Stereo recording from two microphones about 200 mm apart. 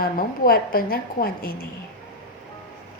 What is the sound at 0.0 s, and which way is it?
A woman's voice, 45° left (ahead or behind).